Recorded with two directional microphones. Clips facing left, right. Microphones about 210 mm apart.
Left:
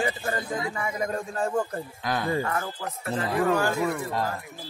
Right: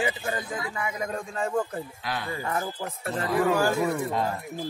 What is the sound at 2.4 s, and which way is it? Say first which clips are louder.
Speech: even; 15° right (ahead or behind).